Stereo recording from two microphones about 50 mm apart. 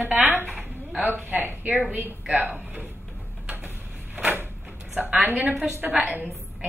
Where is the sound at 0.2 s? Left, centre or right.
Right.